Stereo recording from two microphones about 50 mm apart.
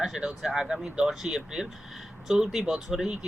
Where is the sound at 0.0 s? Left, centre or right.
Centre.